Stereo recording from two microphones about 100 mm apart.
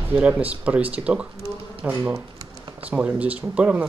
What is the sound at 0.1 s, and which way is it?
Speech, 20° right (ahead or behind).